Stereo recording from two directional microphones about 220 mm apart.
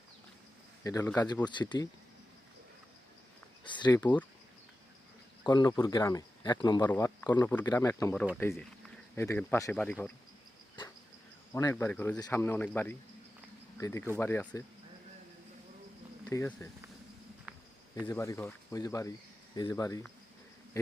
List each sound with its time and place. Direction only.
0.9 s speech: 10° left (ahead or behind)
3.6 s a sound: 20° left (ahead or behind)
5.5 s speech: 15° left (ahead or behind)
11.5 s speech: 10° left (ahead or behind)
16.3 s speech: 10° left (ahead or behind)
17.5 s a sound: 5° right (ahead or behind)
18.0 s speech: 15° left (ahead or behind)